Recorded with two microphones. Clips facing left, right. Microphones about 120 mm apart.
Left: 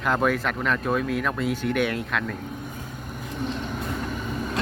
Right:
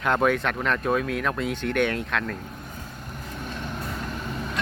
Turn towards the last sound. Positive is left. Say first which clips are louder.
# left 3 dB
turn(degrees=5)  # may be behind; listen again after turning